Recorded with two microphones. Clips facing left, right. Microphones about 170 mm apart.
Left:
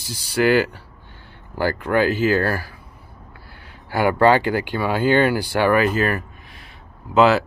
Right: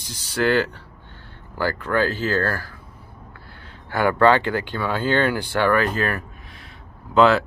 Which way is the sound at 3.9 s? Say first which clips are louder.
Left 1 dB; 10° left (ahead or behind).